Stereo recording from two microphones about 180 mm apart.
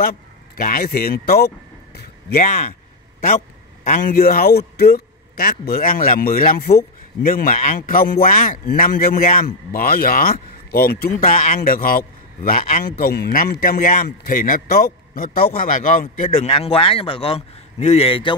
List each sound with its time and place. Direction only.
0.0 s speech: 55° left (ahead or behind)
2.0 s a sound: 65° left (ahead or behind)
3.8 s a man's voice: 50° left (ahead or behind)
16.4 s a man's voice: 30° left (ahead or behind)